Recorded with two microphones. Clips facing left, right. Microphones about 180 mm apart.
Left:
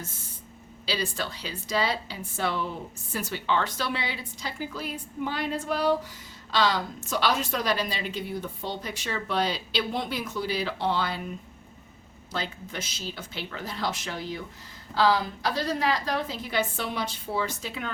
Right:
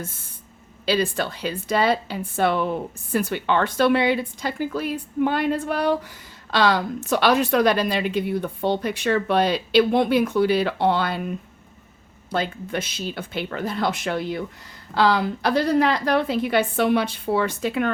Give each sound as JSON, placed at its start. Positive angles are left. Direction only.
{"t": 0.9, "sound": "a woman's voice", "side_deg": -55}
{"t": 12.3, "sound": "a woman's voice", "side_deg": -55}